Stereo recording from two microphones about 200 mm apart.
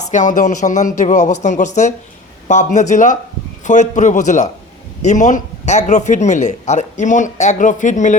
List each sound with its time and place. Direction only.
0.1 s a man's voice: 40° left (ahead or behind)